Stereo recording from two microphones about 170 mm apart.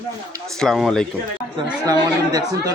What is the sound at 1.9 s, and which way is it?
Speech, 20° right (ahead or behind).